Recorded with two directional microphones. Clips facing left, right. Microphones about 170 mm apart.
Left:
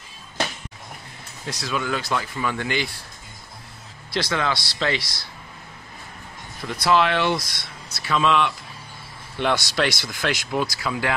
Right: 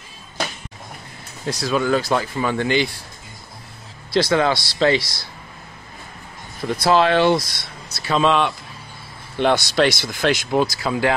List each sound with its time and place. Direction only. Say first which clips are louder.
1.5 s speech: right 7 dB; 35° right (ahead or behind)
4.1 s speech: right 7 dB; 30° right (ahead or behind)
6.7 s speech: right 4 dB; 35° right (ahead or behind)